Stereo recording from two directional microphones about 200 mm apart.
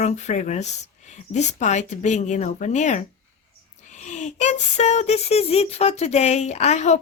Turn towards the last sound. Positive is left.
turn(degrees=35)  # may be behind; listen again after turning